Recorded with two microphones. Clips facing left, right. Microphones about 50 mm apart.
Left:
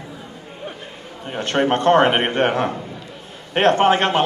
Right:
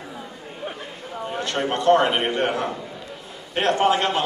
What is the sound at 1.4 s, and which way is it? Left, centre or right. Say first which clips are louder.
A man's voice: left 5 dB; left.